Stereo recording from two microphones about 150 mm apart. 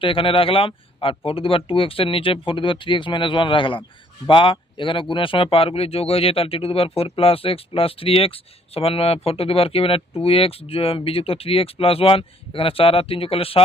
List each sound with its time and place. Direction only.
0.0 s speech: 35° left (ahead or behind)